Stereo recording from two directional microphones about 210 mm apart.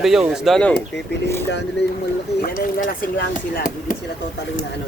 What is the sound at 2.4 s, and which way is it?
Speech, 40° left (ahead or behind).